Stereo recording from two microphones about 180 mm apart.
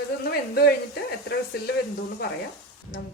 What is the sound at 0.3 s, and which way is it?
Speech, 60° left (ahead or behind).